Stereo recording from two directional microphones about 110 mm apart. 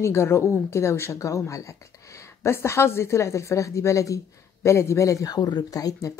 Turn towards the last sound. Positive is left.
turn(degrees=30)  # may be behind; listen again after turning